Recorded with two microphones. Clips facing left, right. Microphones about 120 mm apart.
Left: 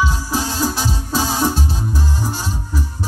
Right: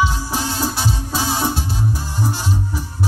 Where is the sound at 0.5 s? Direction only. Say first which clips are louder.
Left 1 dB; 40° left (ahead or behind).